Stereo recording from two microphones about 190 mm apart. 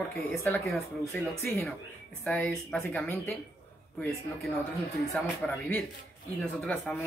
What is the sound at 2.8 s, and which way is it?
Speech, 10° left (ahead or behind).